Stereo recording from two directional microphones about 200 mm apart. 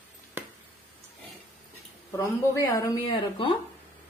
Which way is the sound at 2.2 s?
15° left (ahead or behind).